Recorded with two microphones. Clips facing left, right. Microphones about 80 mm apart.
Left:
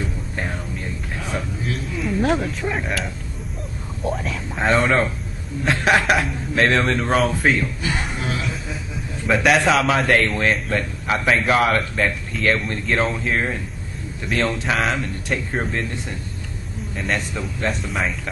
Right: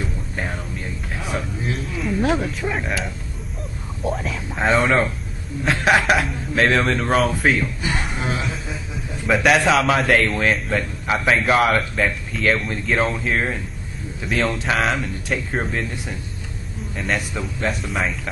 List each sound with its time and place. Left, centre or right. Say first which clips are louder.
1.1 s a sound: right 1 dB; centre
2.0 s a man's voice: even; centre
7.8 s music: right 1 dB; right
9.2 s a man's voice: even; centre